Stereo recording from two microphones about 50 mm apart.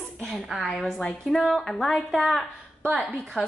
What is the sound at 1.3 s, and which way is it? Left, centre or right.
A woman's voice, centre.